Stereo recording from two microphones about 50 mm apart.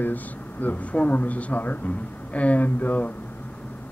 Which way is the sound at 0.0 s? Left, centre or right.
Left.